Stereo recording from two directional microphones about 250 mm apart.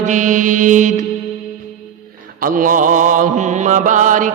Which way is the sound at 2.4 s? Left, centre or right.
Right.